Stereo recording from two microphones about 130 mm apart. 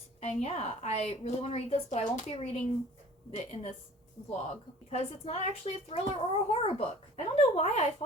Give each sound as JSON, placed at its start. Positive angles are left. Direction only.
{"t": 0.2, "sound": "speech", "side_deg": 55}
{"t": 7.5, "sound": "speech", "side_deg": 60}